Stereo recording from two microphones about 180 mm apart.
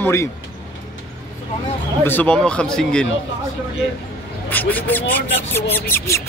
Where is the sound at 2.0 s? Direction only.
10° left (ahead or behind).